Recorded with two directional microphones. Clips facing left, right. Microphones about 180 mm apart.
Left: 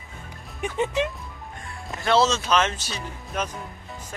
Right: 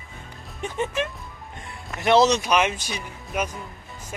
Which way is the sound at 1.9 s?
20° right (ahead or behind).